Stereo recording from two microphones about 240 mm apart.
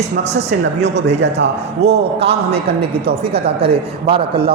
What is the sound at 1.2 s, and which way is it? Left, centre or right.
A man's voice, right.